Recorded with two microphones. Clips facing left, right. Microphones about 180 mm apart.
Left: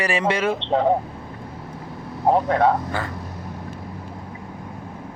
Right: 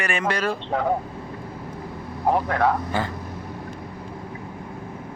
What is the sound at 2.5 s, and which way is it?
Speech, 25° left (ahead or behind).